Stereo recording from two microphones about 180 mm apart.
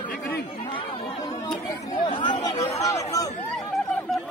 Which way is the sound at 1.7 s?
25° left (ahead or behind).